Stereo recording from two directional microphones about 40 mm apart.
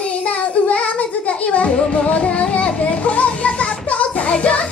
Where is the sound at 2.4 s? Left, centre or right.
Left.